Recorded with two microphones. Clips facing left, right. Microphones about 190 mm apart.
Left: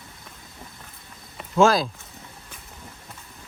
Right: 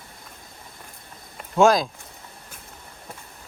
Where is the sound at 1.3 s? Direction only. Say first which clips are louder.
Right 1 dB; centre (ahead or behind).